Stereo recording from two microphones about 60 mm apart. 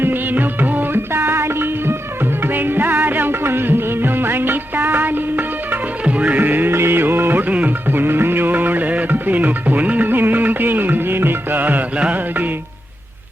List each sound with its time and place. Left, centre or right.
0.0 s music: right
2.5 s music: right
6.1 s music: right